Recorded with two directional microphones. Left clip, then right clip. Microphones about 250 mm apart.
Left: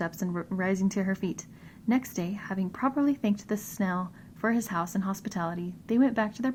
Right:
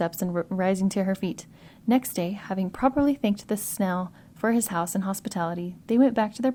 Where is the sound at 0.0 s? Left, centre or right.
Right.